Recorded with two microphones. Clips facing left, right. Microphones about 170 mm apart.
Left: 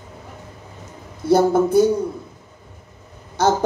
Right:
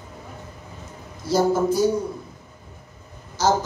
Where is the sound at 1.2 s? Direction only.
60° left (ahead or behind).